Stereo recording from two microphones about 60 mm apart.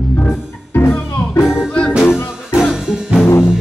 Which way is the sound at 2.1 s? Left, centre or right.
Centre.